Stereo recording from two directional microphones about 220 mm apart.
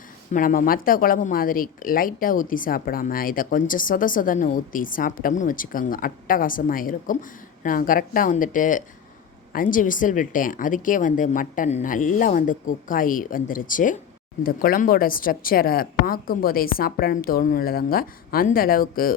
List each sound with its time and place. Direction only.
0.3 s speech: 40° left (ahead or behind)